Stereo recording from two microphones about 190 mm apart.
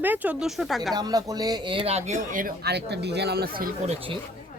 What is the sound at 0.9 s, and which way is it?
Speech, 20° right (ahead or behind).